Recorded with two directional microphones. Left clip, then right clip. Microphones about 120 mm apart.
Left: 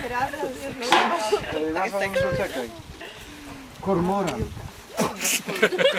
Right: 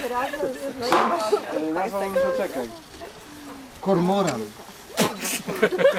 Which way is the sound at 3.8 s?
30° right (ahead or behind).